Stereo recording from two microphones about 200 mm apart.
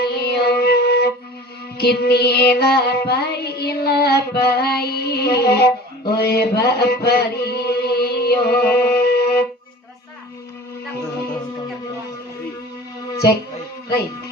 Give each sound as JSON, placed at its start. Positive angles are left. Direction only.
{"t": 0.0, "sound": "music", "side_deg": 55}
{"t": 1.8, "sound": "child singing", "side_deg": 50}